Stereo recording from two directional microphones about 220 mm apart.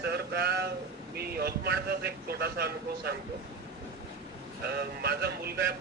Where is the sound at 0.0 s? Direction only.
45° right (ahead or behind).